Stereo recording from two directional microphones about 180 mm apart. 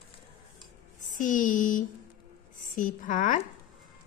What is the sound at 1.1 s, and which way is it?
Speech, 45° left (ahead or behind).